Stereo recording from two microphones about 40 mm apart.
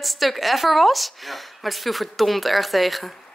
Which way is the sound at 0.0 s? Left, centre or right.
Centre.